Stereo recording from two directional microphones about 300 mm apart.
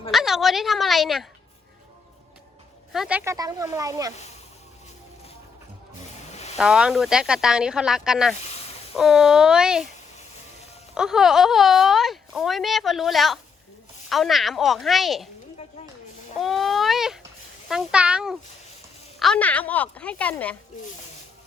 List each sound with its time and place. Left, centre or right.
0.1 s a sound: centre
2.9 s speech: centre
4.1 s speech: left
6.3 s a sound: left
6.6 s speech: centre
8.4 s speech: left
9.0 s speech: centre
10.9 s speech: centre
16.4 s baby cry: centre
17.7 s speech: centre